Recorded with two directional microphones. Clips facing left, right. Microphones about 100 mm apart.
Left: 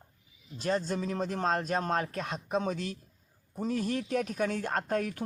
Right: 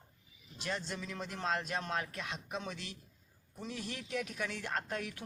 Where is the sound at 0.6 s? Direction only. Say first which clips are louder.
Left 9 dB; 40° left (ahead or behind).